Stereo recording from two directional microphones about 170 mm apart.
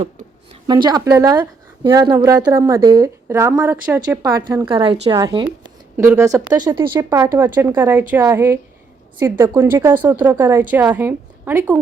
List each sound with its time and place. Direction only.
0.7 s a woman's voice: 25° right (ahead or behind)
6.0 s a woman's voice: 15° right (ahead or behind)
7.1 s a woman's voice: 15° right (ahead or behind)